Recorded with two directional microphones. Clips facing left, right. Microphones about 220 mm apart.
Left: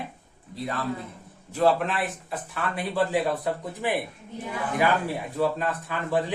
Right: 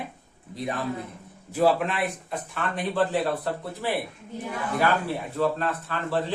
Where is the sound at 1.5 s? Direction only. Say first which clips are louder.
Even; centre (ahead or behind); by 3.9 s 15° left (ahead or behind).